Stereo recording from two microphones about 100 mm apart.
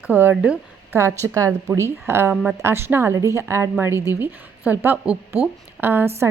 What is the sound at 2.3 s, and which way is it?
Speech, 10° right (ahead or behind).